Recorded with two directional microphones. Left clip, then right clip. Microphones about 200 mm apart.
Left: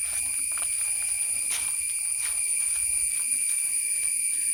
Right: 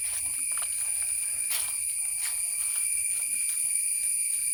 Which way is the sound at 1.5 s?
35° right (ahead or behind).